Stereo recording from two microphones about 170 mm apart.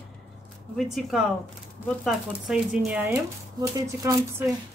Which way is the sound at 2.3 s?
5° right (ahead or behind).